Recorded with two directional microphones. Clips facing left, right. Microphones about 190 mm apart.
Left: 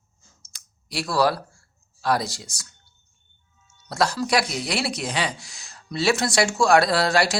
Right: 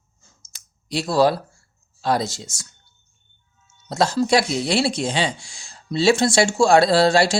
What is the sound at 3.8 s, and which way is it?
Speech, 25° right (ahead or behind).